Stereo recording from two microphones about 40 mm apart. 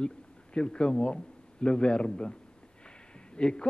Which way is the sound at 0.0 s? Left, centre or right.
Left.